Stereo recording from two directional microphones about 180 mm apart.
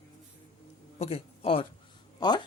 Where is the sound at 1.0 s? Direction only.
35° left (ahead or behind).